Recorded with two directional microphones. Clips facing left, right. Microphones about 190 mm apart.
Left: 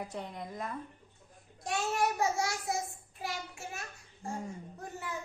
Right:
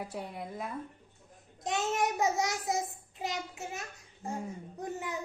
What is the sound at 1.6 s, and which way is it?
A child's voice, 20° right (ahead or behind).